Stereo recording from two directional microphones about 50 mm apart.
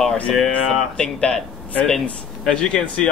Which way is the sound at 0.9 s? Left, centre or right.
Centre.